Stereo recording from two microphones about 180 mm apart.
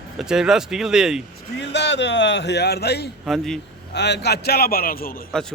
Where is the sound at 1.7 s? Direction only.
75° left (ahead or behind).